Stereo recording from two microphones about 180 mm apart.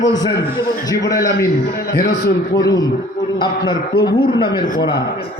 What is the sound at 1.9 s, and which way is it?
Speech, 65° left (ahead or behind).